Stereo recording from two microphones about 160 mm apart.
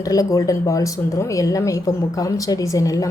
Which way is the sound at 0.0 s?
20° left (ahead or behind).